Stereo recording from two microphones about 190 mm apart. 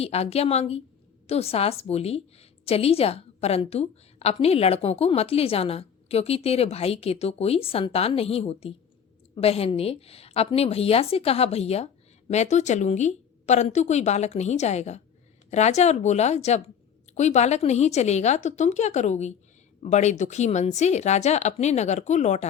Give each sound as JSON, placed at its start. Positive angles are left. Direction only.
{"t": 0.0, "sound": "a woman's voice", "side_deg": 35}